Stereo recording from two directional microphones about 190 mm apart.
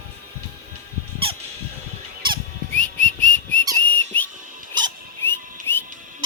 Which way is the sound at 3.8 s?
10° left (ahead or behind).